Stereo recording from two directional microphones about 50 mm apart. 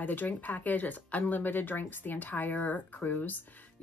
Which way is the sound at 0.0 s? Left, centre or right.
Left.